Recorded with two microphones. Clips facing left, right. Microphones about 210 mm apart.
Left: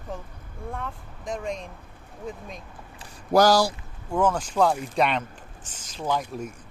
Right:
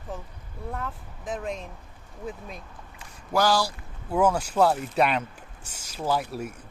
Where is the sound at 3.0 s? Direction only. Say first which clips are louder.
Left 5 dB; 40° left (ahead or behind).